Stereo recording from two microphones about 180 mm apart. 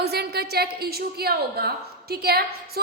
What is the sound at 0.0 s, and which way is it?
A woman's voice, 65° right (ahead or behind).